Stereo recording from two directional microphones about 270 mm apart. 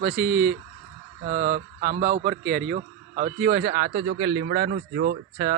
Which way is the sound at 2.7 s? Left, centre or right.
Right.